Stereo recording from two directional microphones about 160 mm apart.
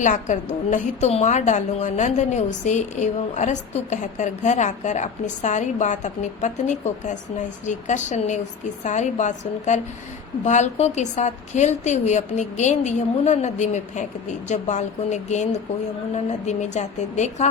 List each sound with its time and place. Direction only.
0.0 s a woman's voice: 50° left (ahead or behind)